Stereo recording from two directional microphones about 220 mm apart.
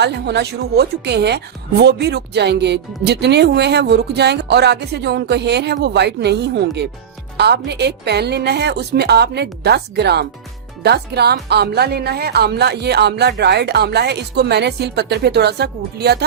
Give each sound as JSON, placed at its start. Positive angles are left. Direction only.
{"t": 0.0, "sound": "a woman's voice", "side_deg": -50}